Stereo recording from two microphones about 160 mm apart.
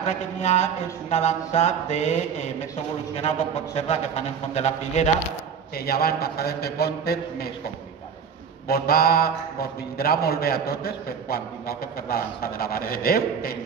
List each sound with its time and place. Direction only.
0.0 s mantra: 45° left (ahead or behind)
3.2 s speech: 40° left (ahead or behind)
4.6 s mantra: 45° left (ahead or behind)
5.8 s speech: 70° left (ahead or behind)
8.6 s speech: 70° left (ahead or behind)